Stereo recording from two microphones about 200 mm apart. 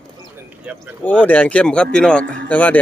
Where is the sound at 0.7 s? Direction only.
5° right (ahead or behind).